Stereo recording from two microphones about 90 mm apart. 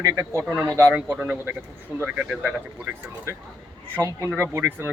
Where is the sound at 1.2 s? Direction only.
20° right (ahead or behind).